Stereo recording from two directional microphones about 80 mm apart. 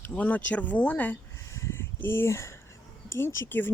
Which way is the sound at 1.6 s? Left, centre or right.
Left.